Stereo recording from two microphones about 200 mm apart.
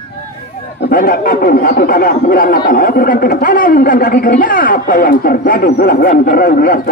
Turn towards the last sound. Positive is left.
turn(degrees=45)  # may be behind; listen again after turning